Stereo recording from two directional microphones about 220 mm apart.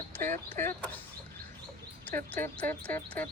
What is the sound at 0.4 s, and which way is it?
Speech, 10° left (ahead or behind).